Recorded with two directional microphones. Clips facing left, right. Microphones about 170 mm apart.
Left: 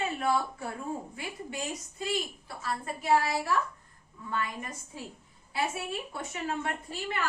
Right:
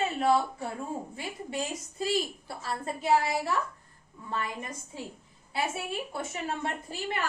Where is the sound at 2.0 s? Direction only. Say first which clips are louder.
Right 4 dB; 30° right (ahead or behind).